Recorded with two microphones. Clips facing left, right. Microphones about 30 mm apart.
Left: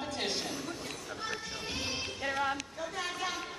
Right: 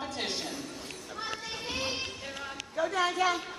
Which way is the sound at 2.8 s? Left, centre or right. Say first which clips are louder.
Right 8 dB; right.